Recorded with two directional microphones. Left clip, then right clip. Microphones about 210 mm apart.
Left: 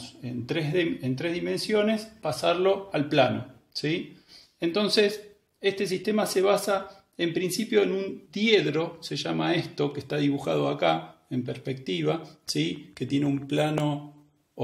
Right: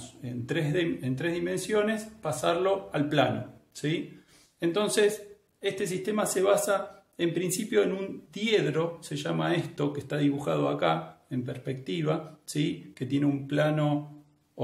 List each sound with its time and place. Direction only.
0.2 s speech: 25° left (ahead or behind)
4.6 s speech: 25° left (ahead or behind)